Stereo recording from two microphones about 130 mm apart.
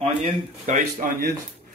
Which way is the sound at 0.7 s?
90° right.